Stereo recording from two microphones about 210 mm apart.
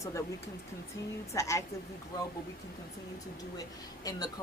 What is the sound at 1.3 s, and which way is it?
Speech, 15° left (ahead or behind).